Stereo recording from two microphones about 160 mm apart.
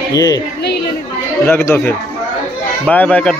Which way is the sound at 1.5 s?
15° left (ahead or behind).